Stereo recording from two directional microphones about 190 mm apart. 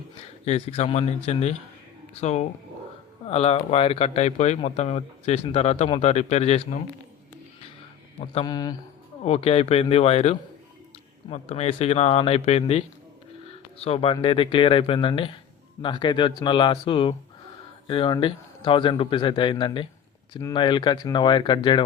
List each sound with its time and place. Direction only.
0.3 s speech: 35° left (ahead or behind)
8.3 s speech: 25° left (ahead or behind)
9.2 s speech: 35° left (ahead or behind)